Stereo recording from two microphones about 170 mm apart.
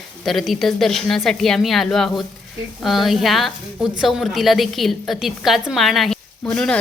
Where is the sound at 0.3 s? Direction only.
Centre (ahead or behind).